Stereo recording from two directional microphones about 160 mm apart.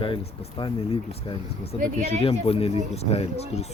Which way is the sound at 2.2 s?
40° left (ahead or behind).